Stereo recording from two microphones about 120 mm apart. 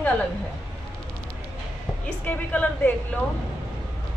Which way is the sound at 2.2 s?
10° left (ahead or behind).